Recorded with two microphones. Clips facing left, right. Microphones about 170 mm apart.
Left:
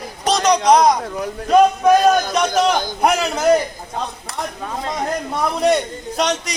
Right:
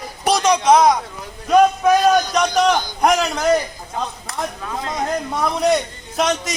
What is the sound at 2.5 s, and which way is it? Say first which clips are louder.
Speech: even; 50° left (ahead or behind).